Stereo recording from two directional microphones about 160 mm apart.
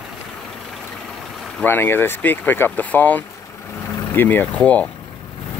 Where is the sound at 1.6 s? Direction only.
15° left (ahead or behind).